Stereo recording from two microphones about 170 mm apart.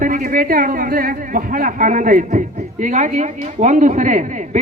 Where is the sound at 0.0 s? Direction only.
55° right (ahead or behind).